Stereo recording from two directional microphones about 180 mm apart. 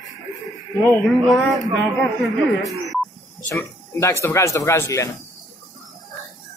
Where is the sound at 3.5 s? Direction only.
15° left (ahead or behind).